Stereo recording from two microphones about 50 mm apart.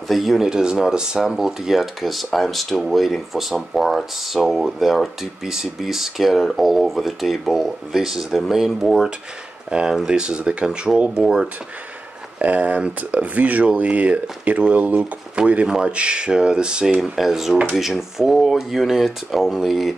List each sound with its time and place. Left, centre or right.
0.1 s speech: centre
9.7 s speech: centre
17.0 s speech: centre